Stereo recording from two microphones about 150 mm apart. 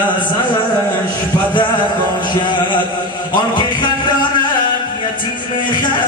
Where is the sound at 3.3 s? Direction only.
30° left (ahead or behind).